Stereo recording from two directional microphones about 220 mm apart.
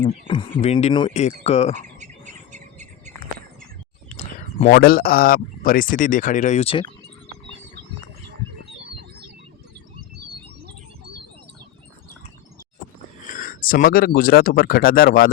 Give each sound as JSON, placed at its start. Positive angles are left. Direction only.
{"t": 0.0, "sound": "speech", "side_deg": 20}
{"t": 2.0, "sound": "bird", "side_deg": -35}
{"t": 4.1, "sound": "a sound", "side_deg": 30}
{"t": 4.7, "sound": "speech", "side_deg": 45}
{"t": 13.2, "sound": "speech", "side_deg": 40}